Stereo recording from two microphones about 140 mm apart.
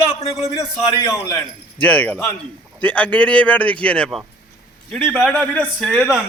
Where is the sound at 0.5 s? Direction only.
20° left (ahead or behind).